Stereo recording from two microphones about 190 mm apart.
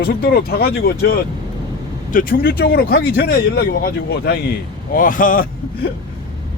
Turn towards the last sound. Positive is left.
turn(degrees=45)  # may be behind; listen again after turning